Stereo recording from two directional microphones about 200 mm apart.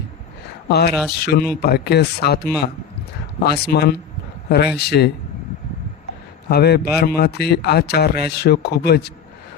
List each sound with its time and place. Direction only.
0.7 s a man's voice: 55° left (ahead or behind)
6.5 s speech: 55° left (ahead or behind)